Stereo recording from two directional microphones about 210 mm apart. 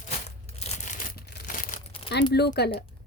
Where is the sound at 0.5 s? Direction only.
30° left (ahead or behind).